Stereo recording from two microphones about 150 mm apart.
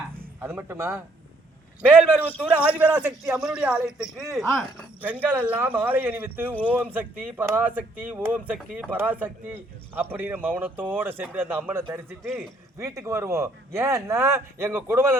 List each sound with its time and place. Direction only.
0.3 s speech: 15° right (ahead or behind)